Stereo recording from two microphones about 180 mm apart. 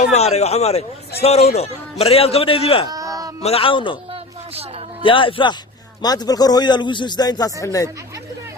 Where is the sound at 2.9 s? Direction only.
20° right (ahead or behind).